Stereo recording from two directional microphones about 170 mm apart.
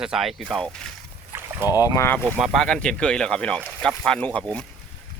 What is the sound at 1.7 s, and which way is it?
Speech, 20° left (ahead or behind).